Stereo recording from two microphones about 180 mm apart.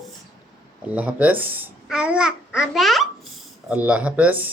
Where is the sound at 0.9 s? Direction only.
10° right (ahead or behind).